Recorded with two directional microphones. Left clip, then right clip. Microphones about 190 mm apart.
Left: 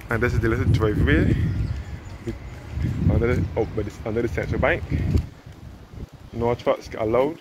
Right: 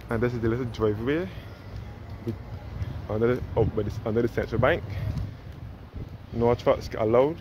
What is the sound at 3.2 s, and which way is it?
Speech, 15° right (ahead or behind).